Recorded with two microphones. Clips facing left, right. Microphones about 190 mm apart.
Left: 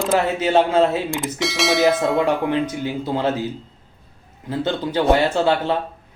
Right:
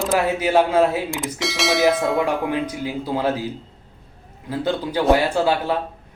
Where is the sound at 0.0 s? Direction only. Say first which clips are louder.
Left 1 dB; 10° right (ahead or behind).